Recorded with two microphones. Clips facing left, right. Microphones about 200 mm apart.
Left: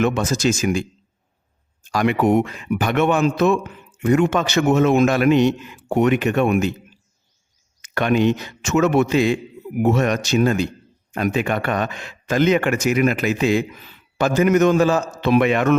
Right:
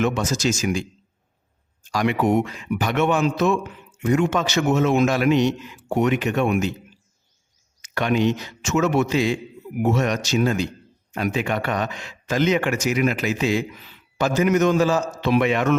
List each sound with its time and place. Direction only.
0.0 s speech: 55° left (ahead or behind)
7.8 s speech: 55° left (ahead or behind)